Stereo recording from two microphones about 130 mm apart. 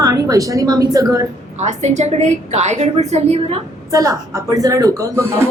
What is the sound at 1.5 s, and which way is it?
A woman's voice, 65° right (ahead or behind).